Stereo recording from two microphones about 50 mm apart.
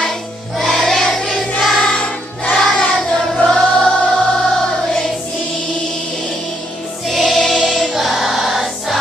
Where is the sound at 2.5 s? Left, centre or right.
Centre.